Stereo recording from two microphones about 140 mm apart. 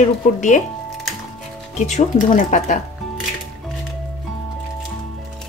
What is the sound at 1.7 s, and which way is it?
Speech, 55° left (ahead or behind).